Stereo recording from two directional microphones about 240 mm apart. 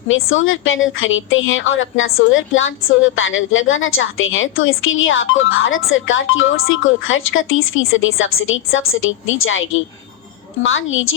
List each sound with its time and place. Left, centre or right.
0.1 s a woman's voice: left